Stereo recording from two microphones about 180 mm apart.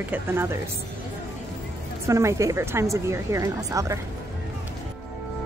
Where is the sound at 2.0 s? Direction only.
15° right (ahead or behind).